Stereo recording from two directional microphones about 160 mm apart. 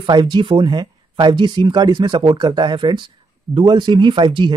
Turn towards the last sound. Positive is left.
turn(degrees=-30)  # may be behind; listen again after turning